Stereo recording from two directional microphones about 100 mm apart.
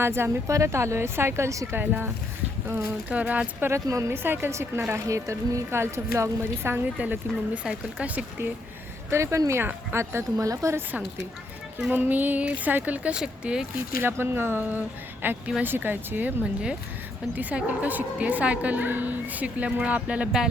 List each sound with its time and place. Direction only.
0.0 s speech: 25° right (ahead or behind)
1.8 s a woman's voice: 20° right (ahead or behind)
3.1 s a woman's voice: 15° right (ahead or behind)
3.7 s speech: 30° right (ahead or behind)
7.0 s a woman's voice: 15° right (ahead or behind)
9.0 s speech: 30° right (ahead or behind)
11.9 s a woman's voice: 20° right (ahead or behind)
14.0 s a woman's voice: 25° right (ahead or behind)